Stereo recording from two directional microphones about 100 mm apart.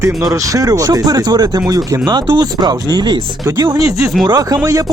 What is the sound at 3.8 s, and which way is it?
Speech, 35° right (ahead or behind).